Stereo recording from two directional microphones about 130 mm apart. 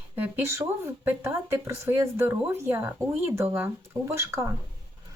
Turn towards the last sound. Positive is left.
turn(degrees=-20)  # may be behind; listen again after turning